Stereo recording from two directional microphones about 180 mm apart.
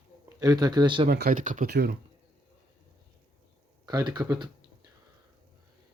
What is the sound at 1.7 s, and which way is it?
Speech, 65° right (ahead or behind).